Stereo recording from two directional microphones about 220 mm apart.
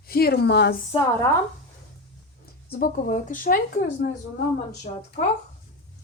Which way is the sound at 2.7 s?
35° left (ahead or behind).